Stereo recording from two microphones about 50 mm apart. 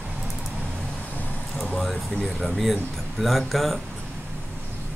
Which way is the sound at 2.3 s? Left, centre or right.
Centre.